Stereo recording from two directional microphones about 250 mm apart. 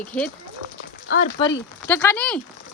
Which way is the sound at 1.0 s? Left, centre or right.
Left.